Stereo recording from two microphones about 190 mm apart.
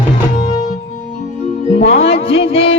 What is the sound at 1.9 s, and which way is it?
Music, 30° left (ahead or behind).